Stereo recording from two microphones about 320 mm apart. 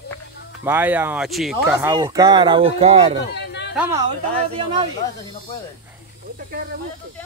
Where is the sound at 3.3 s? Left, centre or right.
Left.